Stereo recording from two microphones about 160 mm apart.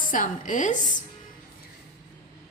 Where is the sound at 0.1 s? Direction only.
55° left (ahead or behind).